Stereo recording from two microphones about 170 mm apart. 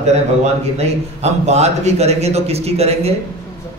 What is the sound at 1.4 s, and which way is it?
A man's voice, 40° right (ahead or behind).